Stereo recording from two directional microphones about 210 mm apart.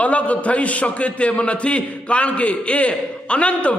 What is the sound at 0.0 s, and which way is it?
A man's voice, 5° left (ahead or behind).